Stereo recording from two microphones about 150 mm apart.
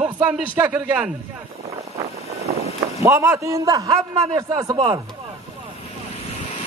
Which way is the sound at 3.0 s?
20° right (ahead or behind).